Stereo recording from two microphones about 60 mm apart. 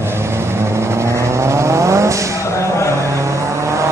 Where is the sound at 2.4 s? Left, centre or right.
Left.